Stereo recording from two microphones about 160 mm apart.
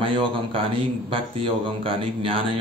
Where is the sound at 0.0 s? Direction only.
35° right (ahead or behind).